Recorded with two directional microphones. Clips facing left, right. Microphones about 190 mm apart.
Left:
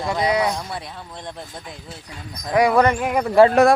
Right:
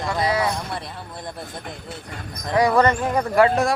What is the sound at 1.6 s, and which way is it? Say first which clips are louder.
Speech: right 3 dB; 55° right (ahead or behind).